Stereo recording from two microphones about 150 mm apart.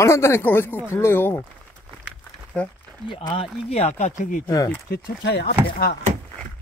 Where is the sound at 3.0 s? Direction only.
30° left (ahead or behind); by 4.4 s 60° left (ahead or behind).